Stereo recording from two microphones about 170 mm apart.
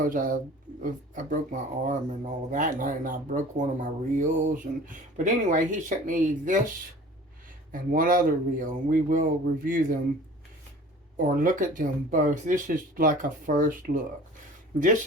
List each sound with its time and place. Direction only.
0.0 s speech: 50° right (ahead or behind)
7.7 s speech: 55° right (ahead or behind)
11.2 s speech: 50° right (ahead or behind)